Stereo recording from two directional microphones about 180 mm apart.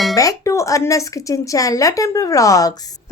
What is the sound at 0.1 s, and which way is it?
Speech, 20° left (ahead or behind).